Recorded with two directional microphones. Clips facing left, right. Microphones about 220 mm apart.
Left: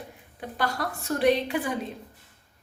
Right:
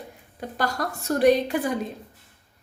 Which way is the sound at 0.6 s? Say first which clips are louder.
Right 2 dB; 45° right (ahead or behind).